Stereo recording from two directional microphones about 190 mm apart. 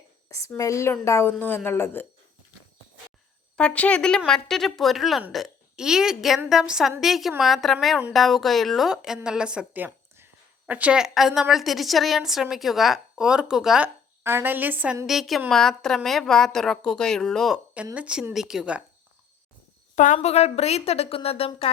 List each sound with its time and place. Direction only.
0.4 s a woman's voice: 15° left (ahead or behind)
3.5 s a woman's voice: 5° left (ahead or behind)
20.1 s a woman's voice: 35° left (ahead or behind)